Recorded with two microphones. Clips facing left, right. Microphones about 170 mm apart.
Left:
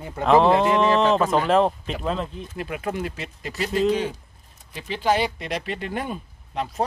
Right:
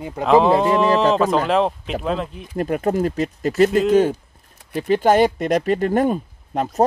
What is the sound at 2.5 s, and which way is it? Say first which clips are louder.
Speech: right 9 dB; 45° right (ahead or behind).